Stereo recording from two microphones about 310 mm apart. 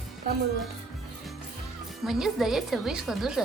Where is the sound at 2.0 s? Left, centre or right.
Centre.